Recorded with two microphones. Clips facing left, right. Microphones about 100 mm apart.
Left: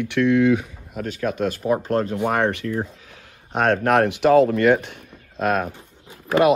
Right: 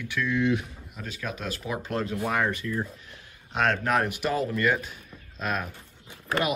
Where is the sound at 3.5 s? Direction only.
50° left (ahead or behind).